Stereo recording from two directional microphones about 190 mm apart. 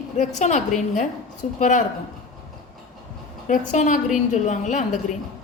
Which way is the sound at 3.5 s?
40° left (ahead or behind).